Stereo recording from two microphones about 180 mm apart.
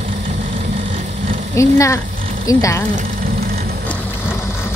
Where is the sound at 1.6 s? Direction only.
15° left (ahead or behind).